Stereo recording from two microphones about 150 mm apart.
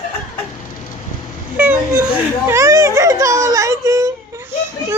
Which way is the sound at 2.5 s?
20° right (ahead or behind).